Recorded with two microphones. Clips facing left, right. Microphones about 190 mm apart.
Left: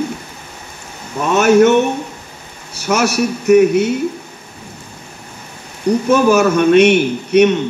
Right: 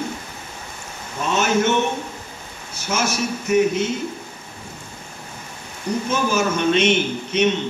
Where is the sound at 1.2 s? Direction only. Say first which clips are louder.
Left 9 dB; 65° left (ahead or behind).